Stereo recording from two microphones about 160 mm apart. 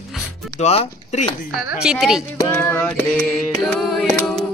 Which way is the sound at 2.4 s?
15° left (ahead or behind).